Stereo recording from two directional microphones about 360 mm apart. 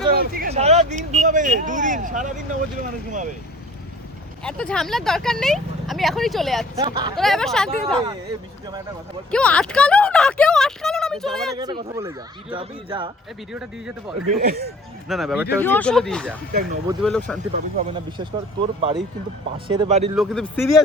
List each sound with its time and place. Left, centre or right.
0.1 s speech: right
4.4 s speech: centre
6.7 s speech: centre
7.2 s speech: centre
9.3 s speech: centre
11.5 s speech: centre
13.5 s speech: centre
14.3 s speech: right
15.0 s speech: centre
16.8 s speech: centre
17.1 s speech: centre
17.5 s speech: centre
20.1 s speech: centre